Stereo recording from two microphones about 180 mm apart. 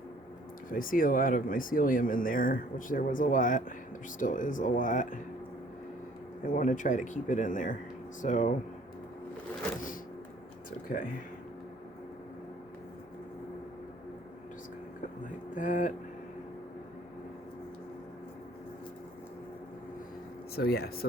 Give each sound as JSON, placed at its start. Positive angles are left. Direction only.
{"t": 0.7, "sound": "speech", "side_deg": 50}
{"t": 6.5, "sound": "speech", "side_deg": 45}
{"t": 15.5, "sound": "speech", "side_deg": 45}
{"t": 20.6, "sound": "speech", "side_deg": 60}